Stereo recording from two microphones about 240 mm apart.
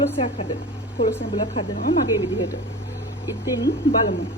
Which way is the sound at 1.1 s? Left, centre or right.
Centre.